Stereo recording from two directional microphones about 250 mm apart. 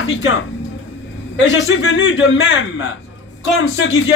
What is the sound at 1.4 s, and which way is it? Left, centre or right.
Speech, left.